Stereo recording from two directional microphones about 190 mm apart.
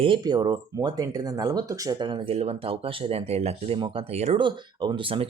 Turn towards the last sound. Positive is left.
turn(degrees=-25)  # may be behind; listen again after turning